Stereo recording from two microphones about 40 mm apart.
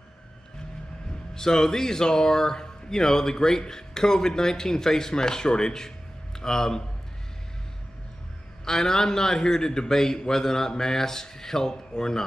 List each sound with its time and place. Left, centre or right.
1.3 s speech: centre
8.6 s speech: centre